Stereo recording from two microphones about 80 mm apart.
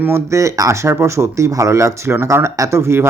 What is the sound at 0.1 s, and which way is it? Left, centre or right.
Speech, right.